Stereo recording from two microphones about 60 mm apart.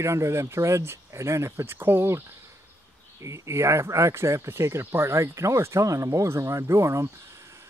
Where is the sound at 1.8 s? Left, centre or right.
Right.